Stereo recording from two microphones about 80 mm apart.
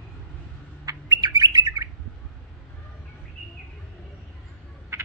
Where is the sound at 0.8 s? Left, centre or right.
Right.